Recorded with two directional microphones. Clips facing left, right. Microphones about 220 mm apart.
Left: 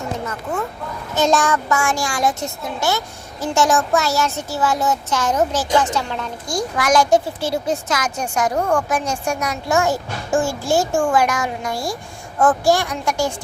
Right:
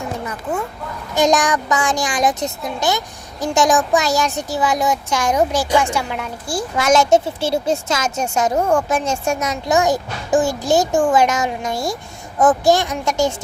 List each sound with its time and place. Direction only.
1.1 s speech: 15° right (ahead or behind)
6.7 s a woman's voice: 25° right (ahead or behind)